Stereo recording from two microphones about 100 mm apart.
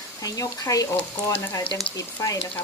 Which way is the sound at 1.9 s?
35° left (ahead or behind).